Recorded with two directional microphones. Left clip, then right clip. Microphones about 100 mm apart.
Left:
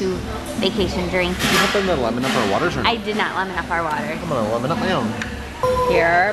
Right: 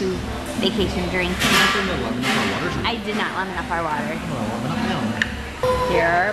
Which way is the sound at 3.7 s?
5° left (ahead or behind).